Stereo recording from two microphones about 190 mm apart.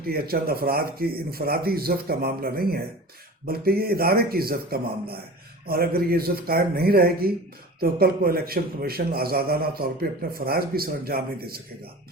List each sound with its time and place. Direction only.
0.0 s a man's voice: 55° right (ahead or behind)